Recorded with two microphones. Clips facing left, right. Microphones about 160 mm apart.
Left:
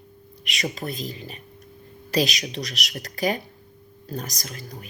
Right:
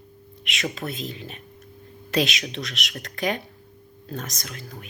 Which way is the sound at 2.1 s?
40° left (ahead or behind).